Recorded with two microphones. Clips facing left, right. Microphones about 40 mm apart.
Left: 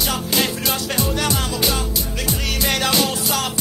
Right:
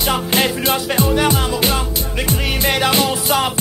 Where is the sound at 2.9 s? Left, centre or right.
Right.